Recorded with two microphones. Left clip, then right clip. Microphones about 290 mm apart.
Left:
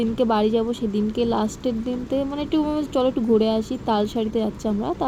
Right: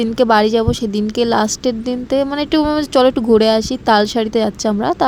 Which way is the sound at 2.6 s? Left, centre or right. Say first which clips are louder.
Right 10 dB; right.